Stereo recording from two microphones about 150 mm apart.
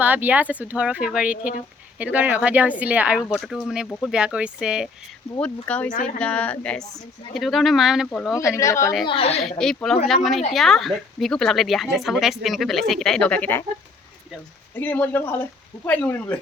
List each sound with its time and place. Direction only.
0.0 s speech: 10° right (ahead or behind)
5.4 s a woman's voice: 10° left (ahead or behind)
8.4 s a woman's voice: 20° left (ahead or behind)
9.0 s a woman's voice: 40° left (ahead or behind)
9.4 s a woman's voice: centre (ahead or behind)
14.8 s speech: 10° left (ahead or behind)